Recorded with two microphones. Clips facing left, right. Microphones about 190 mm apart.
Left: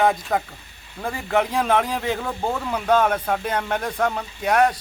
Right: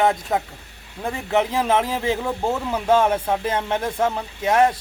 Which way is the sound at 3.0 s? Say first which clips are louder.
Right 1 dB; 25° right (ahead or behind).